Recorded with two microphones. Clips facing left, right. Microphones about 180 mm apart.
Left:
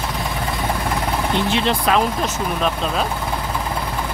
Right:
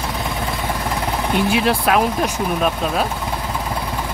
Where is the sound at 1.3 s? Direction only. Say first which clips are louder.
Right 4 dB; 10° right (ahead or behind).